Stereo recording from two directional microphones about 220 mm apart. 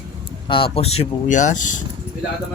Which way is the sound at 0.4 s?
25° left (ahead or behind).